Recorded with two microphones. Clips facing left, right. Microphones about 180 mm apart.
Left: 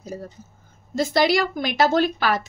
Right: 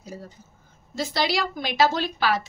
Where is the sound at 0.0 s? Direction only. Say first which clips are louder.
Left 5 dB; 45° left (ahead or behind).